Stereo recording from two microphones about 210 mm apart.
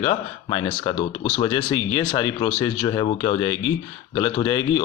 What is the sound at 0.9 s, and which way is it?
Speech, 35° left (ahead or behind).